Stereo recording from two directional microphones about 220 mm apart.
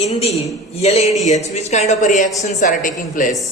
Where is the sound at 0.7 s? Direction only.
30° left (ahead or behind).